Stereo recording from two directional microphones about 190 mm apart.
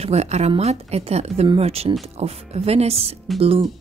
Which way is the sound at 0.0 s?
35° right (ahead or behind).